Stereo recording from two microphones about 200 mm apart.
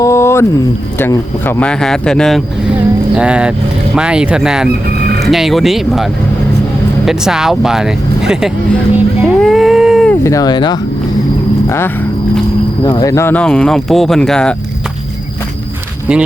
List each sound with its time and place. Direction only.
0.0 s a sound: 15° left (ahead or behind)
0.9 s speech: 10° left (ahead or behind)
9.0 s a sound: centre (ahead or behind)
10.2 s speech: 20° left (ahead or behind)
12.8 s speech: 20° left (ahead or behind); by 14.5 s 5° left (ahead or behind)
16.1 s speech: 5° right (ahead or behind)